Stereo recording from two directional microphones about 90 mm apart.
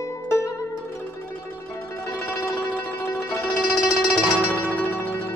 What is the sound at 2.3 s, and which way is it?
Music, 25° left (ahead or behind).